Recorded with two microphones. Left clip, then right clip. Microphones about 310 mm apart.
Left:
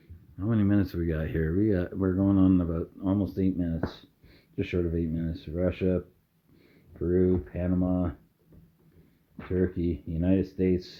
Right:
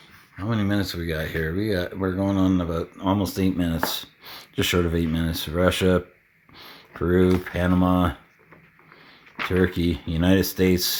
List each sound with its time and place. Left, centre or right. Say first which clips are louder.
0.3 s speech: right 2 dB; centre
6.6 s computer keyboard: right 6 dB; centre
7.5 s speech: right 8 dB; right
9.5 s speech: right 5 dB; centre